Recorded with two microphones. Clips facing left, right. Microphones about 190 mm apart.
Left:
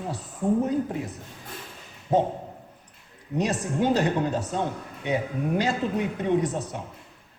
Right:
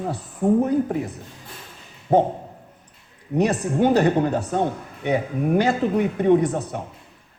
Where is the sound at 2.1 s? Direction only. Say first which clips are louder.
Right 5 dB; 65° right (ahead or behind).